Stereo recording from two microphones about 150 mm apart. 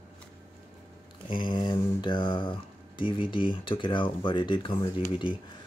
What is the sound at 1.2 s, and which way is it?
Speech, 30° left (ahead or behind).